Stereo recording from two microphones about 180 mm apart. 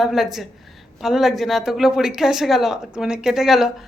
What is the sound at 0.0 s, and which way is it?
Speech, centre (ahead or behind).